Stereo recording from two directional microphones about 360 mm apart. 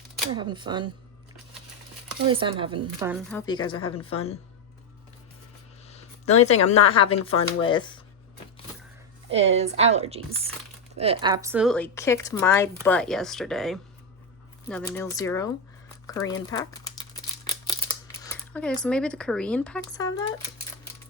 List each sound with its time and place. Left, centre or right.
0.3 s a woman's voice: centre
2.2 s a woman's voice: centre
5.9 s a sound: centre
6.9 s speech: centre
7.3 s speech: left
7.6 s speech: centre
9.3 s a woman's voice: centre
18.2 s speech: centre